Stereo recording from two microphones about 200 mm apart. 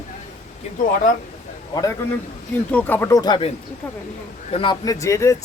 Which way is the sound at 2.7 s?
10° left (ahead or behind).